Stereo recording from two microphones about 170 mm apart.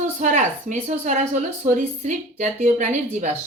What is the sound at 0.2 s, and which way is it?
Speech, 45° right (ahead or behind).